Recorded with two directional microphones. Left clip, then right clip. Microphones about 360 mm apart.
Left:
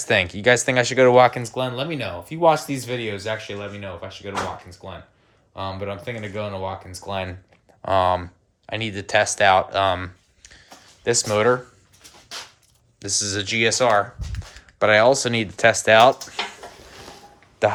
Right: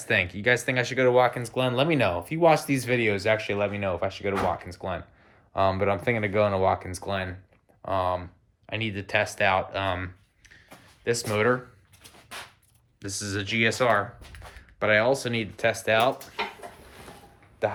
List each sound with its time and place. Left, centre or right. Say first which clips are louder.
0.0 s speech: left 6 dB; centre
1.5 s speech: right 1 dB; centre
7.8 s speech: left 7 dB; left
13.0 s speech: left 8 dB; centre
17.6 s speech: left 8 dB; left